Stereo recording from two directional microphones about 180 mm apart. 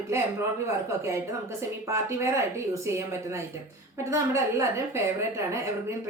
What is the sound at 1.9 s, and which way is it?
Speech, 15° right (ahead or behind).